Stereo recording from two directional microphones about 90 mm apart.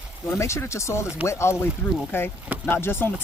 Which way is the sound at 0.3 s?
30° left (ahead or behind).